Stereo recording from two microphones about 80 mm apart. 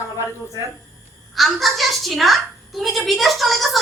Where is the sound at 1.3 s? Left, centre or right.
Centre.